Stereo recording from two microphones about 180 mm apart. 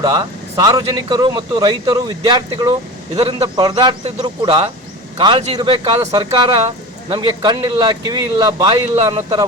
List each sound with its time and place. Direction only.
0.0 s a man's voice: 20° right (ahead or behind)